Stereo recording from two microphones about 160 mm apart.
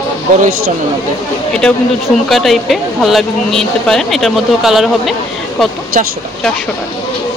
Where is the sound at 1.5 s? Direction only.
Centre (ahead or behind).